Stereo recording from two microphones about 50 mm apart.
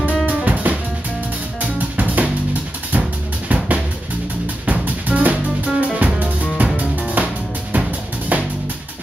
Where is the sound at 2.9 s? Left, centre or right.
Right.